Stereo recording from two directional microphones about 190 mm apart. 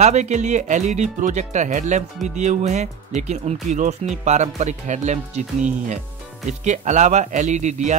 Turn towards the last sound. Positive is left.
turn(degrees=-40)  # may be behind; listen again after turning